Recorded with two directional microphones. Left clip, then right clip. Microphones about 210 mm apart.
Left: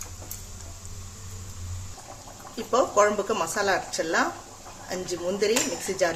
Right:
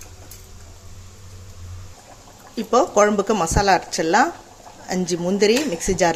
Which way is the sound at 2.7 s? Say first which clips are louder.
Right 5 dB; 35° right (ahead or behind).